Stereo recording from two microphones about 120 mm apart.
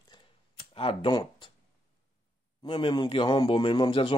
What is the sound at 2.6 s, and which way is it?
Speech, 45° left (ahead or behind).